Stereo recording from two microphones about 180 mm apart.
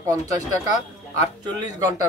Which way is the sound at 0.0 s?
20° right (ahead or behind).